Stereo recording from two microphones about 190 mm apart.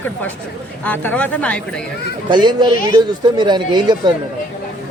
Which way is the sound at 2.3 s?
25° right (ahead or behind).